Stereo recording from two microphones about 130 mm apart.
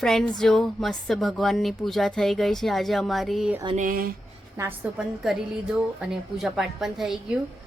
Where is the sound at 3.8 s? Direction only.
90° right.